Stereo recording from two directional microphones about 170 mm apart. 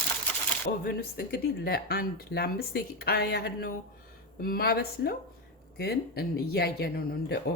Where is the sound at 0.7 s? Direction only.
60° left (ahead or behind).